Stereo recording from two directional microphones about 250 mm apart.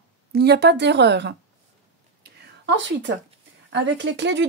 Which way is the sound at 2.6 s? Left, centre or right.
Right.